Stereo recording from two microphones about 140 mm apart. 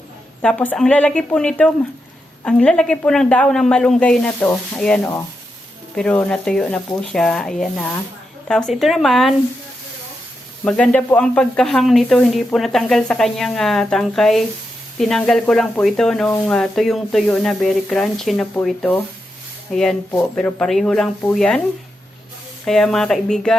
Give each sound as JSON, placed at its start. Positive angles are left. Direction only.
{"t": 0.4, "sound": "speech", "side_deg": 10}
{"t": 10.6, "sound": "speech", "side_deg": 10}
{"t": 22.6, "sound": "speech", "side_deg": 5}